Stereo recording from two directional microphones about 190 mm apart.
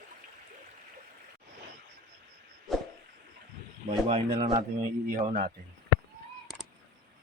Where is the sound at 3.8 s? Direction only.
30° right (ahead or behind).